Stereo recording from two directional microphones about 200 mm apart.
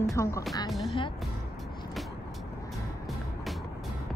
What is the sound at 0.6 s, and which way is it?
Speech, centre (ahead or behind).